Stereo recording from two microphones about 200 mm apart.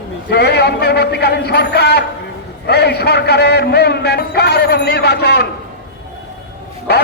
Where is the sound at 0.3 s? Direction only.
55° left (ahead or behind).